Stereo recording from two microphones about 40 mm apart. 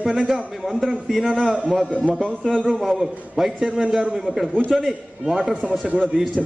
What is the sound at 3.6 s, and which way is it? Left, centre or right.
Speech, right.